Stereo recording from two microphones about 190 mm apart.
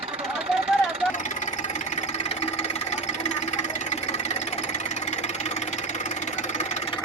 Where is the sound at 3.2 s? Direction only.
35° left (ahead or behind).